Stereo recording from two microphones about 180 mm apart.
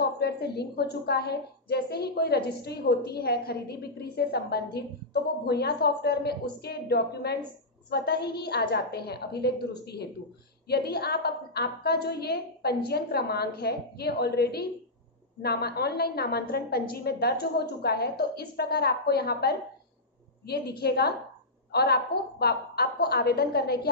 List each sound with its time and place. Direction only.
0.0 s a woman's voice: 65° left (ahead or behind)